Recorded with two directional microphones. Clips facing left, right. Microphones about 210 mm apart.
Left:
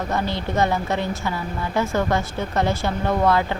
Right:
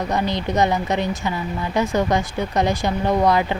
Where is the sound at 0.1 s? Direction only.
15° right (ahead or behind).